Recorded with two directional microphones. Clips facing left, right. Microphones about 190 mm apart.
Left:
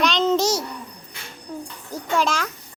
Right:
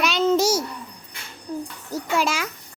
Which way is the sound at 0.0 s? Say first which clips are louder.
Even; 5° right (ahead or behind).